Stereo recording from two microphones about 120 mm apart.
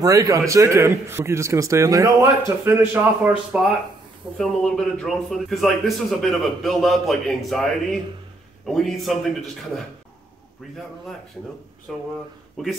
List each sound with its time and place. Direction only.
0.0 s a man's voice: 25° right (ahead or behind)
2.6 s a man's voice: 20° right (ahead or behind)
4.4 s a man's voice: 5° left (ahead or behind)
11.9 s a man's voice: 5° left (ahead or behind)